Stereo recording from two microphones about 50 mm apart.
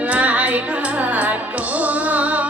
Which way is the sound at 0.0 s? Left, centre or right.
Right.